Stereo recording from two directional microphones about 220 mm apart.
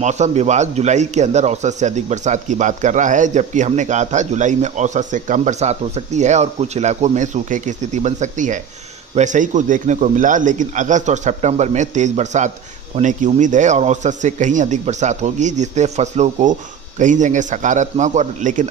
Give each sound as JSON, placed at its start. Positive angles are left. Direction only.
{"t": 0.0, "sound": "speech", "side_deg": -30}